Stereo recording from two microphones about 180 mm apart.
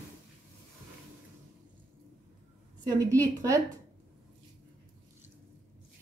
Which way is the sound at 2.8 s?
20° right (ahead or behind).